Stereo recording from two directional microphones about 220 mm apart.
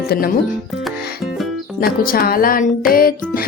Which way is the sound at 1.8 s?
40° left (ahead or behind).